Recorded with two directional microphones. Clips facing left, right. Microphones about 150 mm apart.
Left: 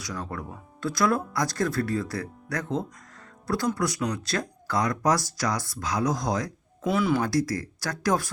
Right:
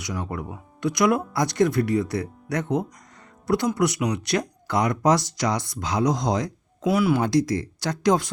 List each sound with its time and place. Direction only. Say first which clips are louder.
0.0 s speech: right 4 dB; 20° right (ahead or behind)
6.8 s speech: right 3 dB; 5° right (ahead or behind)
7.2 s speech: right 4 dB; 20° right (ahead or behind)